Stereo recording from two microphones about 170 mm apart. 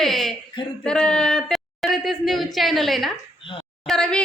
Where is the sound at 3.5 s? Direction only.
30° left (ahead or behind).